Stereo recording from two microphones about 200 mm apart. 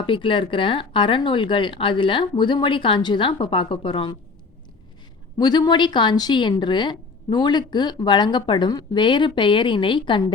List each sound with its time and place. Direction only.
0.0 s speech: 25° left (ahead or behind)
5.4 s speech: 20° left (ahead or behind)